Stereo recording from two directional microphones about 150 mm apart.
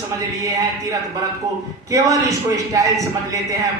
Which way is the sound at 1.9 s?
20° right (ahead or behind).